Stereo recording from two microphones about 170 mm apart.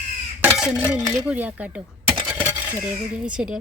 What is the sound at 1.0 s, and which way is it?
Speech, 20° right (ahead or behind).